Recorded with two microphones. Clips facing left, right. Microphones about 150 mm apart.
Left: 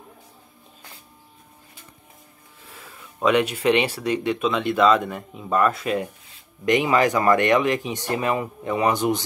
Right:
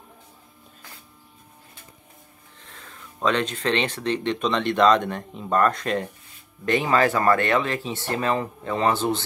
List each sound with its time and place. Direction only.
2.6 s speech: 10° left (ahead or behind)